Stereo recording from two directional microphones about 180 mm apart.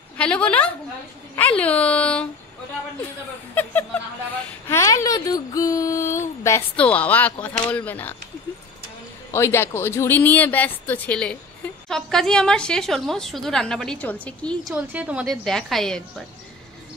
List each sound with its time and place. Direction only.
0.2 s speech: 5° left (ahead or behind)
3.5 s speech: 10° left (ahead or behind)
9.3 s a woman's voice: 15° left (ahead or behind)